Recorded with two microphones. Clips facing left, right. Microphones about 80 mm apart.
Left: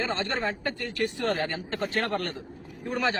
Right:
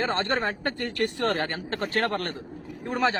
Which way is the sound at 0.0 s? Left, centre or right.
Right.